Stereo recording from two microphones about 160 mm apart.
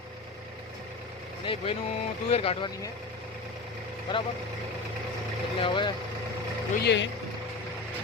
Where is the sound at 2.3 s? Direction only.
35° left (ahead or behind).